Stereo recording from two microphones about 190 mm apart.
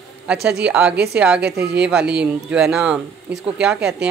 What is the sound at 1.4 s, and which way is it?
Speech, 60° right (ahead or behind).